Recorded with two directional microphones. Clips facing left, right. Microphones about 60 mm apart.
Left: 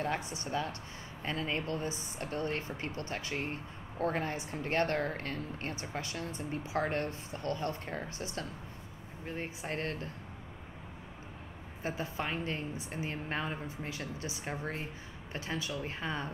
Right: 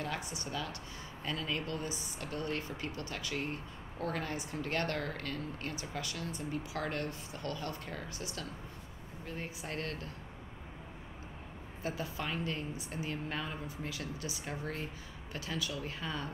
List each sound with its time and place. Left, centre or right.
0.0 s speech: left
11.8 s speech: left